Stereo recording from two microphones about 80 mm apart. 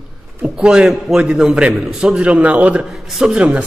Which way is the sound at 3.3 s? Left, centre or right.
Centre.